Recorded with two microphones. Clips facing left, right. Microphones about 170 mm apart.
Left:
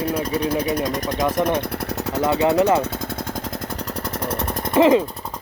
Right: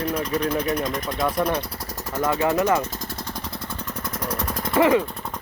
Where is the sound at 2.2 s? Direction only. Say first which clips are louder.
Left 4 dB; 20° left (ahead or behind).